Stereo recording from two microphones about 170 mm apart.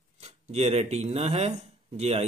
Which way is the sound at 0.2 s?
40° right (ahead or behind).